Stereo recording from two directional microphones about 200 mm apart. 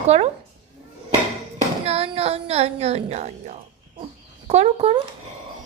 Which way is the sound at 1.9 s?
30° right (ahead or behind).